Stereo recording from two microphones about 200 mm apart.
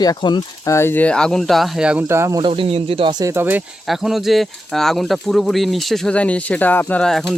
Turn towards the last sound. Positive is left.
turn(degrees=0)  # may be behind; listen again after turning